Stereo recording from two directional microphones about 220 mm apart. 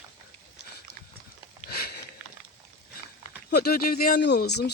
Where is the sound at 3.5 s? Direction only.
45° left (ahead or behind).